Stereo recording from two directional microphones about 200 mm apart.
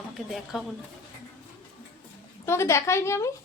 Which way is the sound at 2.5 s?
15° left (ahead or behind).